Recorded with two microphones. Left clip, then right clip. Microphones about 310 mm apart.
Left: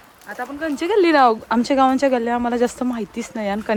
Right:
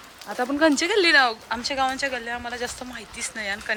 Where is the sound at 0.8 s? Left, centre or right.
Centre.